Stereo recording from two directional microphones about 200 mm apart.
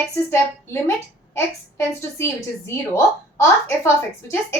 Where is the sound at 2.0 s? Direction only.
15° left (ahead or behind).